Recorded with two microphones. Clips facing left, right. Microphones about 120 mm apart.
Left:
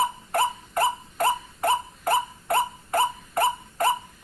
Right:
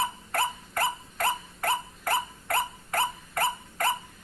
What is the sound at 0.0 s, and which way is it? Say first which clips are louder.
Dog: left 5 dB; 20° left (ahead or behind).